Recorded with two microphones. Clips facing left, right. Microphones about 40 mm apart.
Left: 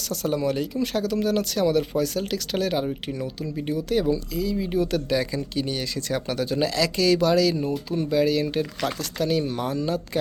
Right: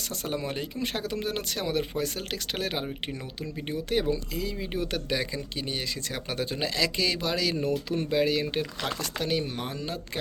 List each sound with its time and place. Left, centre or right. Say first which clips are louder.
0.2 s speech: left 8 dB; right
3.8 s speech: left 3 dB; right
5.1 s speech: left 6 dB; centre
7.5 s speech: left 2 dB; right
8.1 s speech: left 4 dB; right